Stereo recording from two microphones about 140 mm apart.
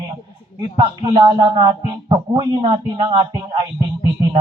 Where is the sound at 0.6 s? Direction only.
30° right (ahead or behind).